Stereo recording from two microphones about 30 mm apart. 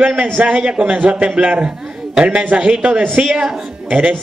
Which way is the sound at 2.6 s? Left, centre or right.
Right.